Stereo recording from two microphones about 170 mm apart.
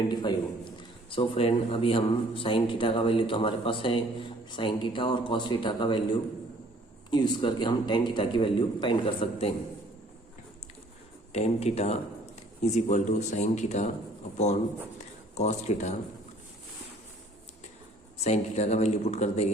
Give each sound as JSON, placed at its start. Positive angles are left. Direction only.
{"t": 0.1, "sound": "a man's voice", "side_deg": 25}
{"t": 7.1, "sound": "a man's voice", "side_deg": 25}
{"t": 11.3, "sound": "speech", "side_deg": 40}
{"t": 14.9, "sound": "a sound", "side_deg": 40}
{"t": 18.2, "sound": "speech", "side_deg": 40}